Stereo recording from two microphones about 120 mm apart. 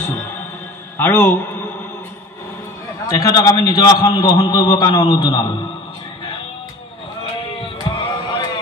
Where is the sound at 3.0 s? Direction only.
30° left (ahead or behind).